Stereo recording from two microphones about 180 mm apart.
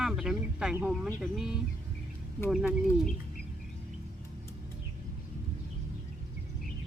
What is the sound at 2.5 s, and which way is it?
Speech, 5° right (ahead or behind).